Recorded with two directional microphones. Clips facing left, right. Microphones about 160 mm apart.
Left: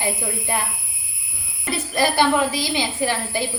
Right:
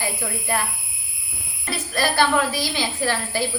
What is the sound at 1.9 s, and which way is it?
A woman's voice, 20° left (ahead or behind).